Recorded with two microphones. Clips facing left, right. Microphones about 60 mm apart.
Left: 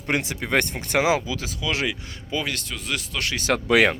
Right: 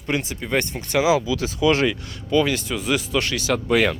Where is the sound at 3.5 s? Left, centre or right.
Left.